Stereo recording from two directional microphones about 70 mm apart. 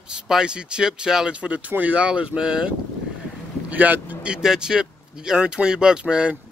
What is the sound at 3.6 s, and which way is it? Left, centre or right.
Speech, right.